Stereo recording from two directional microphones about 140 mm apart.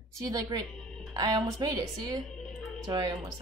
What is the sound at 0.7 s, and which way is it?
Music, 5° left (ahead or behind).